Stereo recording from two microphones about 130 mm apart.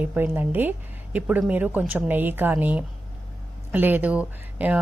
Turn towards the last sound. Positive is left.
turn(degrees=-10)  # may be behind; listen again after turning